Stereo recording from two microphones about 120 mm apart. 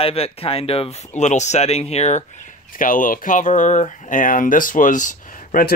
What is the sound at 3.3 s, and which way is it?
Speech, 90° left.